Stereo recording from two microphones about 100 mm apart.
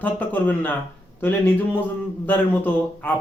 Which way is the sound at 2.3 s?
15° left (ahead or behind).